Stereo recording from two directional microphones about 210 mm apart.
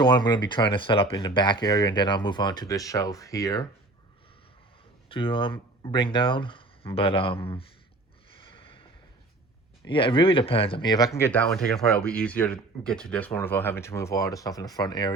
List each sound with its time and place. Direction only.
0.0 s speech: 20° left (ahead or behind)
5.0 s speech: 25° left (ahead or behind)
8.4 s snort: 25° left (ahead or behind)
9.8 s speech: 25° left (ahead or behind)
11.5 s speech: centre (ahead or behind); by 15.1 s 20° left (ahead or behind)